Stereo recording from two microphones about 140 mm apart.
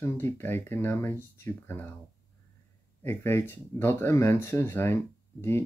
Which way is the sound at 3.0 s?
15° left (ahead or behind).